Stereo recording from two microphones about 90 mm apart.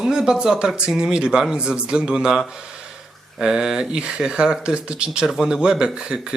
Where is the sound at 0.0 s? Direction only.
5° right (ahead or behind).